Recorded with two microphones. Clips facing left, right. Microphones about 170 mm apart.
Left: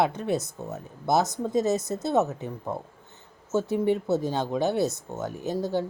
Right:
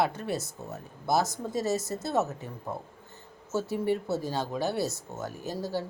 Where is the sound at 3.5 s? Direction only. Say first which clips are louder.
Left 4 dB; 20° left (ahead or behind).